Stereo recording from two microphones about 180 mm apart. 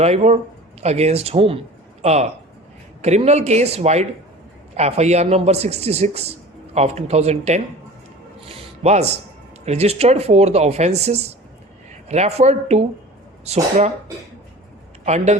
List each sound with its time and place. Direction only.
0.0 s speech: 35° right (ahead or behind)
8.4 s a sound: 35° right (ahead or behind)
9.6 s speech: 35° right (ahead or behind)
15.0 s speech: 40° right (ahead or behind)